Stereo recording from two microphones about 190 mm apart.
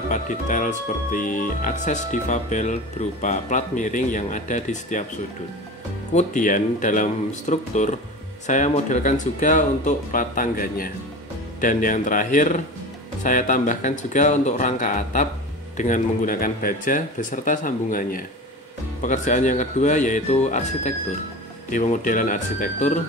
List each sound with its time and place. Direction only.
0.1 s speech: 45° left (ahead or behind)
6.1 s speech: 45° left (ahead or behind)